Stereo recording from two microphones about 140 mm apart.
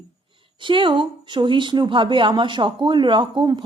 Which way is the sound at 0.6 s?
35° right (ahead or behind).